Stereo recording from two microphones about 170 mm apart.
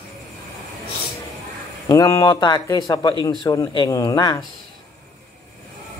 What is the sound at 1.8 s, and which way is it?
Speech, 20° left (ahead or behind).